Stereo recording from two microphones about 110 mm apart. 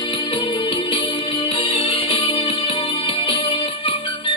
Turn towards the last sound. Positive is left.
turn(degrees=50)  # may be behind; listen again after turning